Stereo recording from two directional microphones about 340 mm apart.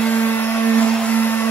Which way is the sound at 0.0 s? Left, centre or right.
Centre.